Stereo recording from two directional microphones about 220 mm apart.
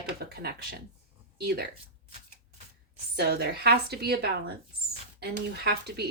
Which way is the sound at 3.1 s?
45° right (ahead or behind).